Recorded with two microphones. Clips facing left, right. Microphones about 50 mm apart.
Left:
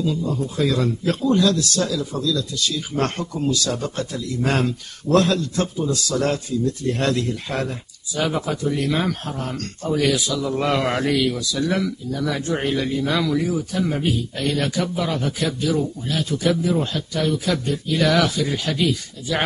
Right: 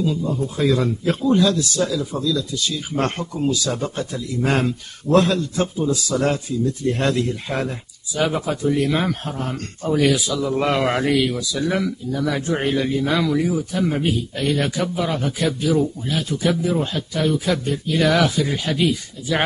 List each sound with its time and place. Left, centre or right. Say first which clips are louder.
0.0 s speech: right 1 dB; centre